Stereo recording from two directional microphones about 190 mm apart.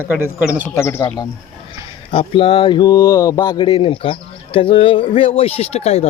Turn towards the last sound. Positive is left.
turn(degrees=35)  # may be behind; listen again after turning